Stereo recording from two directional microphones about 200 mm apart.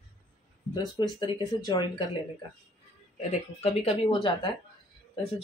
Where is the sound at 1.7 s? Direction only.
20° left (ahead or behind).